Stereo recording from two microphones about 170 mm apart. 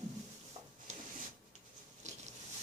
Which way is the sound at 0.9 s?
40° right (ahead or behind).